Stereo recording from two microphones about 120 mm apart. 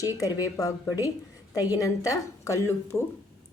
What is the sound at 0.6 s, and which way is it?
A woman's voice, 30° left (ahead or behind).